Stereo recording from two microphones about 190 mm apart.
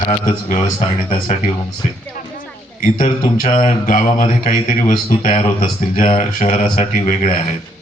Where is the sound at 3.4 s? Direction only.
35° left (ahead or behind).